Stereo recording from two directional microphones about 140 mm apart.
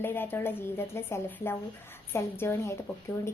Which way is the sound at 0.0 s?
15° left (ahead or behind).